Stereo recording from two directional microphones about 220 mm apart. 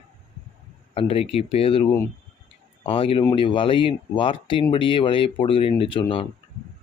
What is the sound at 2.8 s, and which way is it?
Speech, 25° left (ahead or behind).